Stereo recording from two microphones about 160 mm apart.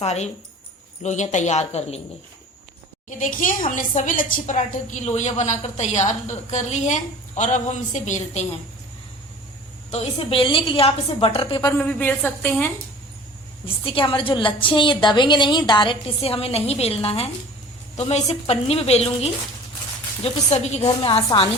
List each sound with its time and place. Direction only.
0.0 s a woman's voice: 45° left (ahead or behind)
3.2 s a woman's voice: 55° left (ahead or behind)
9.9 s a woman's voice: 40° left (ahead or behind)
11.8 s a woman's voice: 10° left (ahead or behind)
13.8 s a woman's voice: 35° left (ahead or behind)
20.5 s a woman's voice: 40° left (ahead or behind)